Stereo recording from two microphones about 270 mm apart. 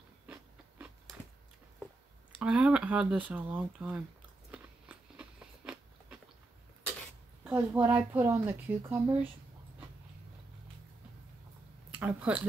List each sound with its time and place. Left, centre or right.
0.3 s biting: centre
2.3 s speech: centre
4.5 s biting: centre
7.4 s speech: centre
11.9 s speech: centre